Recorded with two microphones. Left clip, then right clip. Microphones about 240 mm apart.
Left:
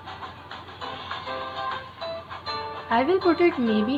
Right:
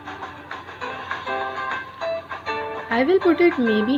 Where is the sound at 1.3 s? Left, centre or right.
Right.